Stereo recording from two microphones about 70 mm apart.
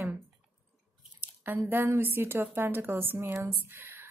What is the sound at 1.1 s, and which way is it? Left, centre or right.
Drip, right.